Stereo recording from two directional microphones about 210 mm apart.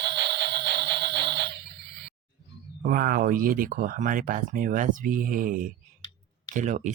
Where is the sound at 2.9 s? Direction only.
45° right (ahead or behind).